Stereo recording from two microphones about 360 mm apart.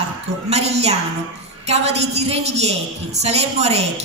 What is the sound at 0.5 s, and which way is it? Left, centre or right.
A woman's voice, centre.